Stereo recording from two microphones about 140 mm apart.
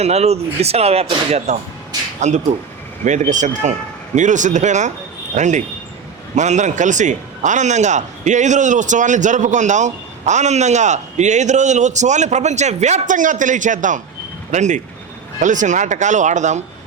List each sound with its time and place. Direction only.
0.0 s speech: 50° right (ahead or behind)
1.5 s a man's voice: 55° right (ahead or behind)